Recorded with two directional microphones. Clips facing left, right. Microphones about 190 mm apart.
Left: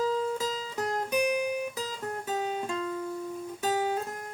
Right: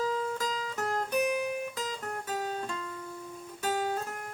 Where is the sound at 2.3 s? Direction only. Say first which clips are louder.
Left 4 dB; 15° left (ahead or behind).